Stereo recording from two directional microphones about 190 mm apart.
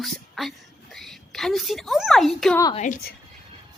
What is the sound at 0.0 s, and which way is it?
A child's voice, centre (ahead or behind).